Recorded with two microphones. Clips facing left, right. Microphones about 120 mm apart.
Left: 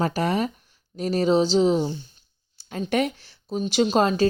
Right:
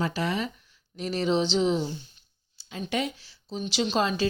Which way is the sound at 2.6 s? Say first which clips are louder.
Left 6 dB; 50° left (ahead or behind).